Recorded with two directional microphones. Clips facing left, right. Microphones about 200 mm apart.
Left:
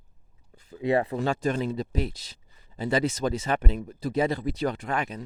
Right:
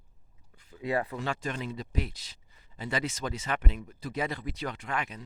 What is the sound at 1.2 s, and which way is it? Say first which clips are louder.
Speech: left 8 dB; 45° left (ahead or behind).